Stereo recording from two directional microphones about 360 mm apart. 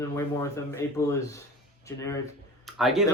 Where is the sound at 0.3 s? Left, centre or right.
Centre.